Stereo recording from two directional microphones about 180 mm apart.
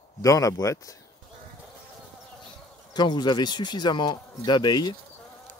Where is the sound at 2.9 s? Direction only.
25° left (ahead or behind).